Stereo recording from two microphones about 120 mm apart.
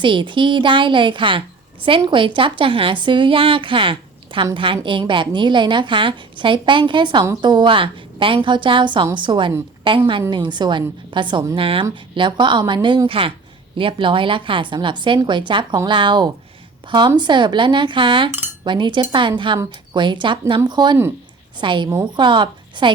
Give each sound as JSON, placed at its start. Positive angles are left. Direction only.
{"t": 0.0, "sound": "a woman's voice", "side_deg": -45}